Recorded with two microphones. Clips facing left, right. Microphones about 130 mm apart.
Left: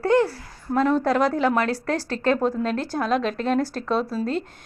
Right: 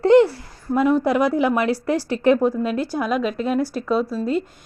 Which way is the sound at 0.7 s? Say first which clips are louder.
Right 2 dB; 10° right (ahead or behind).